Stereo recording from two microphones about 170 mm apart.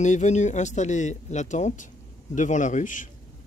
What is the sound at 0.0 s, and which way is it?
Speech, 45° left (ahead or behind).